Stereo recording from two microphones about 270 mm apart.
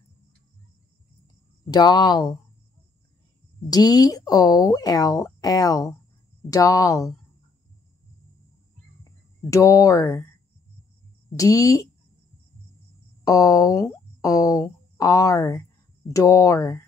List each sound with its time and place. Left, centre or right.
1.7 s speech: centre
3.7 s speech: centre
9.5 s speech: centre
11.3 s speech: centre
13.2 s speech: centre